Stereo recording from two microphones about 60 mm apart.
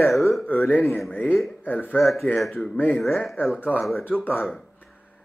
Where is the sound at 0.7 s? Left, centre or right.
Left.